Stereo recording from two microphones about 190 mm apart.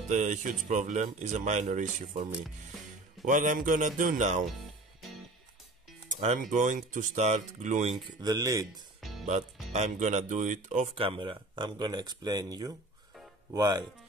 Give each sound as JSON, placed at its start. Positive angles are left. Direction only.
{"t": 0.1, "sound": "speech", "side_deg": -40}
{"t": 3.3, "sound": "speech", "side_deg": -45}
{"t": 6.0, "sound": "speech", "side_deg": -40}
{"t": 8.2, "sound": "speech", "side_deg": -20}
{"t": 9.2, "sound": "speech", "side_deg": -35}
{"t": 11.0, "sound": "speech", "side_deg": -25}